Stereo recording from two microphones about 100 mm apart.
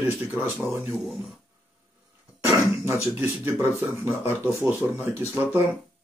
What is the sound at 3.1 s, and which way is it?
Speech, 20° right (ahead or behind).